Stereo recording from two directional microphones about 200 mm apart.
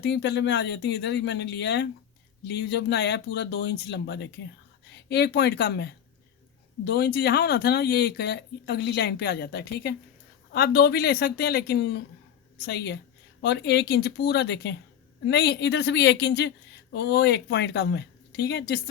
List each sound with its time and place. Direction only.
0.0 s a woman's voice: 60° left (ahead or behind)